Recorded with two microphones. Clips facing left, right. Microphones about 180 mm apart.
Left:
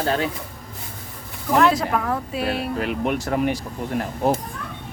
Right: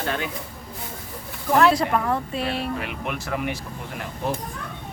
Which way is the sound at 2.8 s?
35° left (ahead or behind).